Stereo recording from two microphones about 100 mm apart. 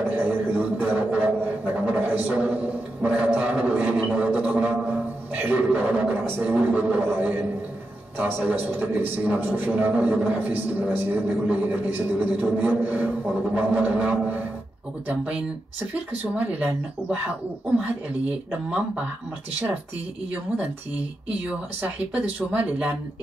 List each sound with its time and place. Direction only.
0.0 s a sound: 20° right (ahead or behind)
0.8 s a man's voice: 20° right (ahead or behind)
21.5 s a man's voice: 15° right (ahead or behind)